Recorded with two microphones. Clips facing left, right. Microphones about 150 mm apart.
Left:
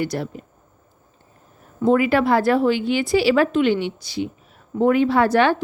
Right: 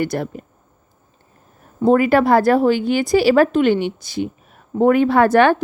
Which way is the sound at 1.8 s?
45° right (ahead or behind).